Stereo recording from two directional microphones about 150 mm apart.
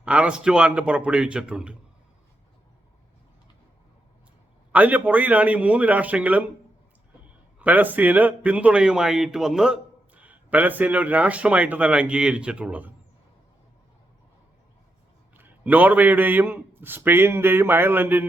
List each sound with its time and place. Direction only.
0.0 s a man's voice: 10° right (ahead or behind)
4.7 s a man's voice: 10° right (ahead or behind)
7.6 s a man's voice: 10° right (ahead or behind)
15.4 s a man's voice: 10° right (ahead or behind)